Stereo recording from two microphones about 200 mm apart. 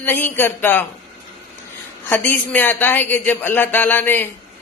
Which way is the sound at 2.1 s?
10° left (ahead or behind).